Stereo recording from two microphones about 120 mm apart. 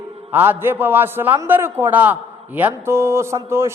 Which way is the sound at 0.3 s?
15° right (ahead or behind).